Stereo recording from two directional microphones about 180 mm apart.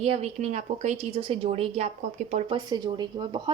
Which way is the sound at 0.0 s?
35° right (ahead or behind).